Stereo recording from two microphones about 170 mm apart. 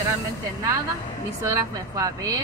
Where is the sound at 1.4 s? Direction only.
20° right (ahead or behind).